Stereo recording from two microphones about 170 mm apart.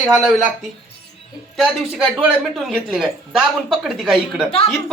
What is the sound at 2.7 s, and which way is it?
Speech, centre (ahead or behind).